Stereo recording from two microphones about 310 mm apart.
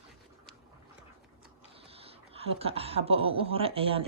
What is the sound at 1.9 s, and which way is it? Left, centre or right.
Speech, centre.